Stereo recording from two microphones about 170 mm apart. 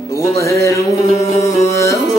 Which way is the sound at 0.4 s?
15° left (ahead or behind).